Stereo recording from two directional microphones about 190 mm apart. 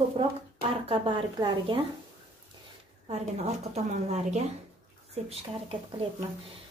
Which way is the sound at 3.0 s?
35° right (ahead or behind).